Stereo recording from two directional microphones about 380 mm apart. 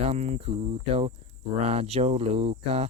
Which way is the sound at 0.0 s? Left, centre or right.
Centre.